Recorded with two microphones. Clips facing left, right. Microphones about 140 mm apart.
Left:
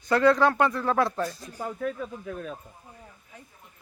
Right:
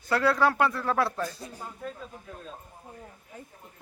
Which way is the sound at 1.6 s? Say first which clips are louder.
Left 10 dB; 80° left.